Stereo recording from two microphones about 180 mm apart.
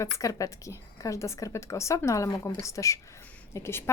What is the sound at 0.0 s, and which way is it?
A woman's voice, 20° left (ahead or behind).